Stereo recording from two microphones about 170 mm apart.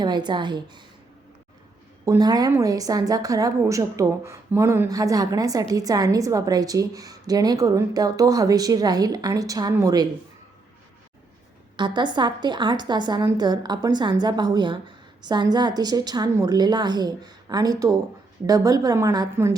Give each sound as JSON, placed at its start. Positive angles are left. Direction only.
{"t": 0.0, "sound": "a woman's voice", "side_deg": -25}
{"t": 2.0, "sound": "a woman's voice", "side_deg": -20}
{"t": 11.8, "sound": "a woman's voice", "side_deg": -25}